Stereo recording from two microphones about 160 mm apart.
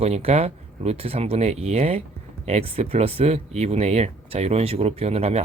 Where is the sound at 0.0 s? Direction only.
40° right (ahead or behind).